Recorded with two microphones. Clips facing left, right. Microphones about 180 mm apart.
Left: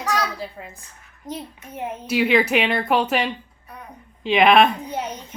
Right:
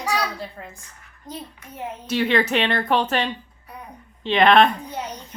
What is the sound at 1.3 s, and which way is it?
Speech, 20° left (ahead or behind).